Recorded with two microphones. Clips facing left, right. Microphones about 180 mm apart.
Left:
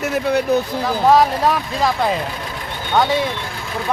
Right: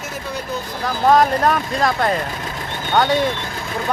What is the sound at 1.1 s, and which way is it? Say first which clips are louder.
Speech: even; 5° left (ahead or behind).